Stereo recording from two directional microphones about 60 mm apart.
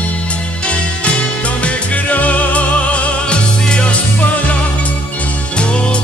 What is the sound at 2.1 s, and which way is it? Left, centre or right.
Music, left.